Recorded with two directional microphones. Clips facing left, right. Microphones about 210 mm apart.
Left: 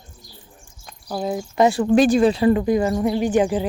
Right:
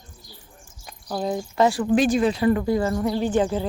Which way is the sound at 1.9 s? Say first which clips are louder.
Left 4 dB; 35° left (ahead or behind).